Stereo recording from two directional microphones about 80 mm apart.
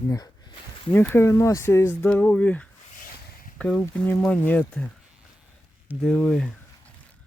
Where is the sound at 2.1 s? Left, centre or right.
Centre.